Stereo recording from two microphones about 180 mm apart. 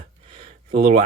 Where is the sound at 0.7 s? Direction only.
55° right (ahead or behind).